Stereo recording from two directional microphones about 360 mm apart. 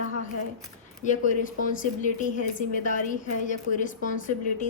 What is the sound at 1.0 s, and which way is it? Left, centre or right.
A woman's voice, left.